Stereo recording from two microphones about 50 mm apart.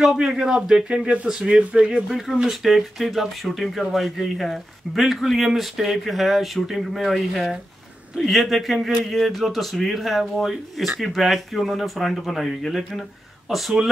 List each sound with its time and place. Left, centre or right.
0.0 s speech: centre
1.0 s speech: right
2.0 s speech: centre